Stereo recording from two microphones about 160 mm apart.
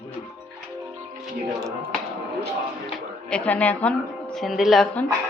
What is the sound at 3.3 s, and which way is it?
A woman's voice, 10° left (ahead or behind).